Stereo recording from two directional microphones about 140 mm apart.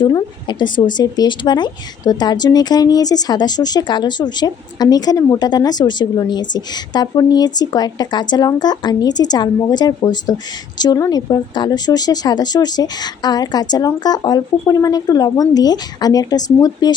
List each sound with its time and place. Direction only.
0.0 s speech: 30° left (ahead or behind)